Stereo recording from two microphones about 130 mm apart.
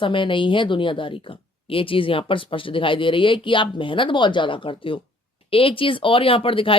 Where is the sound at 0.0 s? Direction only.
40° left (ahead or behind).